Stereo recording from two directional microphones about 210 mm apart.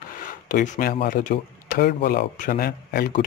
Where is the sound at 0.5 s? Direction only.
40° left (ahead or behind).